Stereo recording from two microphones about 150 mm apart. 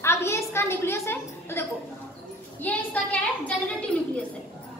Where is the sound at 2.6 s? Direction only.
10° left (ahead or behind).